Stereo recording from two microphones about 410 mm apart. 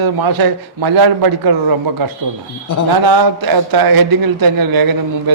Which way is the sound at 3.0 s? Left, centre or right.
Right.